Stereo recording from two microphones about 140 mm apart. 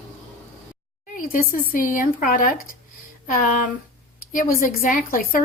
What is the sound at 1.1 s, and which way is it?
Speech, 75° left (ahead or behind).